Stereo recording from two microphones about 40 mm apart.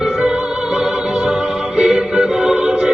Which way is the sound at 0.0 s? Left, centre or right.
Centre.